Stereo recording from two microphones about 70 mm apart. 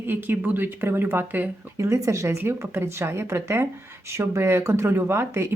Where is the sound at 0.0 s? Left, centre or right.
Right.